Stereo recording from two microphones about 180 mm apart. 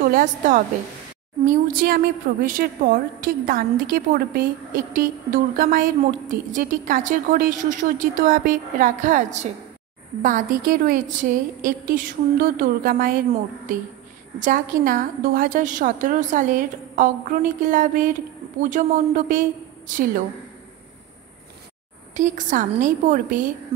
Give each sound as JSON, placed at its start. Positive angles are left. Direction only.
{"t": 0.0, "sound": "a woman's voice", "side_deg": -50}
{"t": 22.1, "sound": "a woman's voice", "side_deg": -45}